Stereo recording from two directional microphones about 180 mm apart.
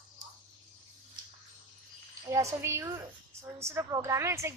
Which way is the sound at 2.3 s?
15° right (ahead or behind).